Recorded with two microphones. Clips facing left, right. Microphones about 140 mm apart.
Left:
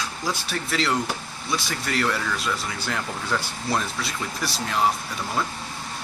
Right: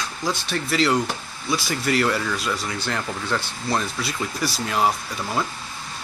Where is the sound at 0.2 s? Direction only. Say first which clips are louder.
Right 4 dB; 5° left (ahead or behind).